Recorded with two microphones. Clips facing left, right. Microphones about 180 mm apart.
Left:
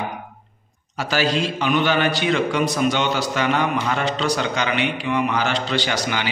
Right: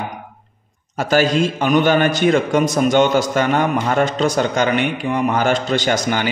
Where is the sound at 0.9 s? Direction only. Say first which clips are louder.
Right 6 dB; 50° right (ahead or behind).